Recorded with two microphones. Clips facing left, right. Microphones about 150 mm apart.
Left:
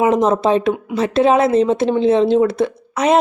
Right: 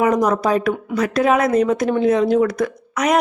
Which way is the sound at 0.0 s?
25° left (ahead or behind).